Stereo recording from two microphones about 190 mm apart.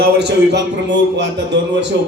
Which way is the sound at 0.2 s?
65° right (ahead or behind).